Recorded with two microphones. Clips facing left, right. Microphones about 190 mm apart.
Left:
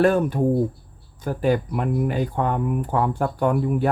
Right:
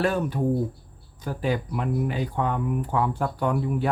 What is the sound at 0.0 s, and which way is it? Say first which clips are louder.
Speech: left 6 dB; 50° left (ahead or behind).